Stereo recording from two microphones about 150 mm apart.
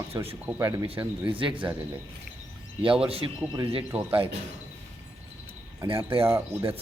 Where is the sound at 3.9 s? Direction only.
40° right (ahead or behind).